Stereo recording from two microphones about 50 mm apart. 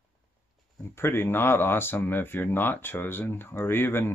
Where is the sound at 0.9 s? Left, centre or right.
Left.